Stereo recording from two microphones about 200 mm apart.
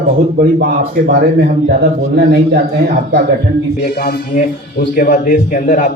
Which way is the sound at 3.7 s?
50° left (ahead or behind).